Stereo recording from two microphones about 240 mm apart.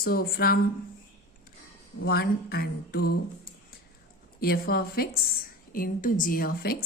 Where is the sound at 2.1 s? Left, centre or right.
Left.